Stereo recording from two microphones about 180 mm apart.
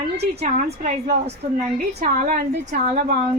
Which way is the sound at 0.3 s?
40° right (ahead or behind).